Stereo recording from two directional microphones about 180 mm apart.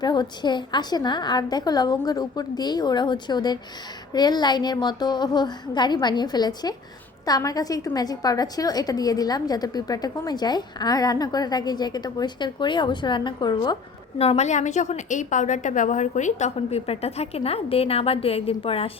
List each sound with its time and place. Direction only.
0.0 s a woman's voice: 25° left (ahead or behind)
14.2 s a woman's voice: 35° left (ahead or behind)